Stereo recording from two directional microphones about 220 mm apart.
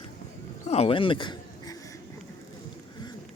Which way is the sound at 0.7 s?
25° left (ahead or behind).